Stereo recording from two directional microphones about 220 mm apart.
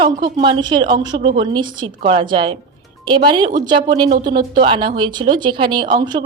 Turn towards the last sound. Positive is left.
turn(degrees=-20)  # may be behind; listen again after turning